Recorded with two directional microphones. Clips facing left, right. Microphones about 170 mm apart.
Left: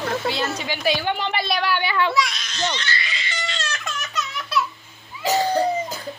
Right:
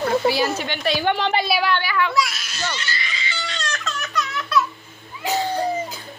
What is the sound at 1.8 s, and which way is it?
Speech, 25° left (ahead or behind).